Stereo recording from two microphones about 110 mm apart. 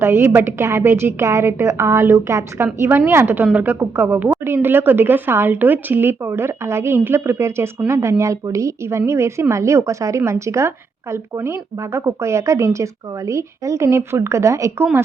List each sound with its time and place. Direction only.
0.0 s a woman's voice: 25° right (ahead or behind)